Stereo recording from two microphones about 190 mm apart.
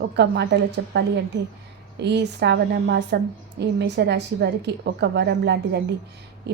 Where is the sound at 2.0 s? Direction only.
65° right (ahead or behind).